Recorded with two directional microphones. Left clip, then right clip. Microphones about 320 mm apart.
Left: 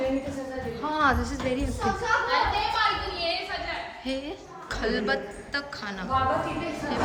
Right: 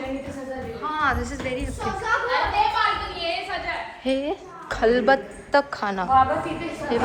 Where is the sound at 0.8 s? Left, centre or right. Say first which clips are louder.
Even; centre.